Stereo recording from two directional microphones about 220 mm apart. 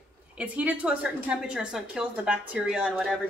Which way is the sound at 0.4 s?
5° right (ahead or behind).